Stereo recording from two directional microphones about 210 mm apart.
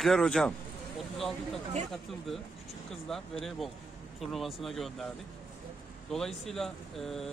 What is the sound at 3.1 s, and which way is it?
Speech, centre (ahead or behind).